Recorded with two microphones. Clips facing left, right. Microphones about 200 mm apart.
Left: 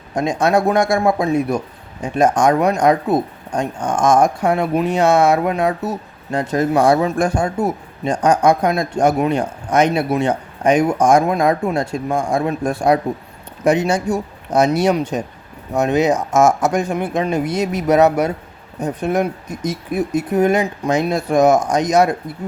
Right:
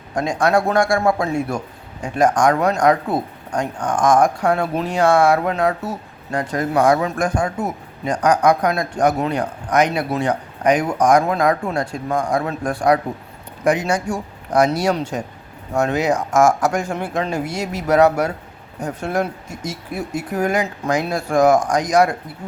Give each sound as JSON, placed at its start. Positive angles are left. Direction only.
{"t": 0.1, "sound": "speech", "side_deg": 20}